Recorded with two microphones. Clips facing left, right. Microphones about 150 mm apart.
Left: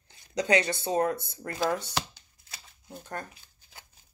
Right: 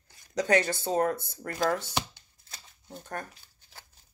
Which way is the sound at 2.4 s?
10° left (ahead or behind).